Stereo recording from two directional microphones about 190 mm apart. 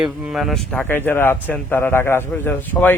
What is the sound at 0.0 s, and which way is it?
Speech, 5° right (ahead or behind).